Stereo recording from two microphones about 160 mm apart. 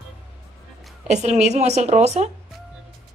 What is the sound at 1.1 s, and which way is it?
A woman's voice, 45° right (ahead or behind).